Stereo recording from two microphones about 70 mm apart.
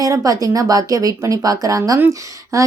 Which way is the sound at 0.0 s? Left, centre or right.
Right.